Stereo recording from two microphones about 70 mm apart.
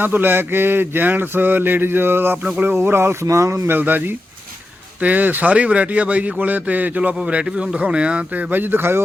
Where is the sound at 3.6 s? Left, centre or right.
Right.